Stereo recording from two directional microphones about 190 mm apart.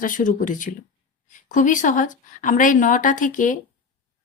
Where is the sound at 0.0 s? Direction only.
45° left (ahead or behind).